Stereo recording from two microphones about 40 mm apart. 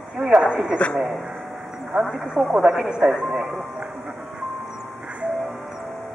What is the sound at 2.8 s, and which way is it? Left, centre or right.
Speech, centre.